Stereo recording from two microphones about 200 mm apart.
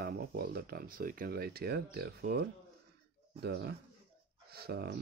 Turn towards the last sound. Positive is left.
turn(degrees=-55)  # may be behind; listen again after turning